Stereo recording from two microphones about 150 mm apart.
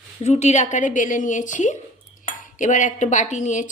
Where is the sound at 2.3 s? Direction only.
55° left (ahead or behind).